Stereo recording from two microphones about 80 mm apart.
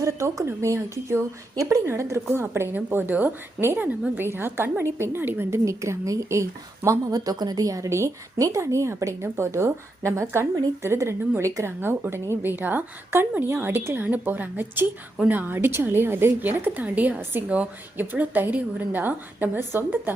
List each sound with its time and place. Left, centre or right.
0.0 s a woman's voice: right
11.8 s a woman's voice: right